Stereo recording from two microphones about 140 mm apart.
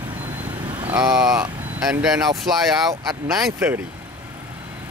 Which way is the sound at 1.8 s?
5° right (ahead or behind).